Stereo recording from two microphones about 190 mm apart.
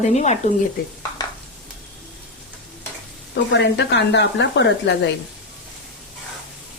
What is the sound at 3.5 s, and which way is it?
Speech, 70° left (ahead or behind).